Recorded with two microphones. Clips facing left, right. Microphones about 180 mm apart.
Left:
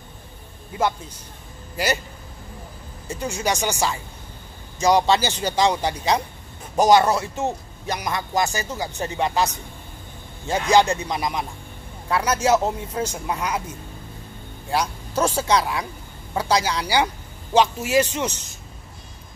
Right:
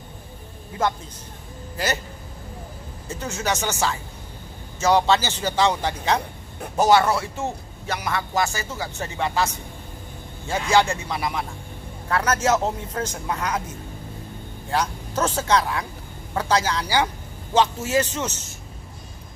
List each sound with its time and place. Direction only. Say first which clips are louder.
3.1 s a man's voice: left 2 dB; 15° left (ahead or behind)
10.5 s a man's voice: left 2 dB; 20° left (ahead or behind)
14.7 s a man's voice: left 1 dB; 10° left (ahead or behind)